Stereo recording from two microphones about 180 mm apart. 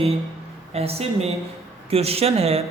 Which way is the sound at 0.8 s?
35° right (ahead or behind).